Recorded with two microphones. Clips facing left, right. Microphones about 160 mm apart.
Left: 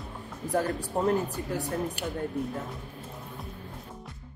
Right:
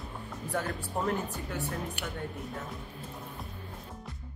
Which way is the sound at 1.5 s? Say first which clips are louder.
Left 5 dB; 35° left (ahead or behind).